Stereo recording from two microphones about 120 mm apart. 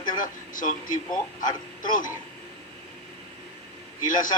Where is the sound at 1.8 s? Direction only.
90° left.